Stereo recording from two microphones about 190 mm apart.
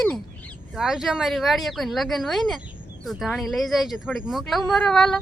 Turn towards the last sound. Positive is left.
turn(degrees=5)  # may be behind; listen again after turning